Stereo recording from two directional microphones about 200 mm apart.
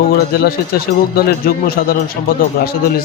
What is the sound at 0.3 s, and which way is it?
A man's voice, 50° left (ahead or behind).